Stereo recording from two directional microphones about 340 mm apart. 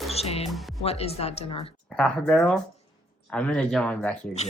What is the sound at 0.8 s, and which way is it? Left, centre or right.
Speech, centre.